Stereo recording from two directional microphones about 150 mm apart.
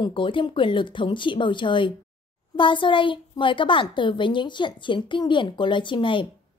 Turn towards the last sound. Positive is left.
turn(degrees=35)  # may be behind; listen again after turning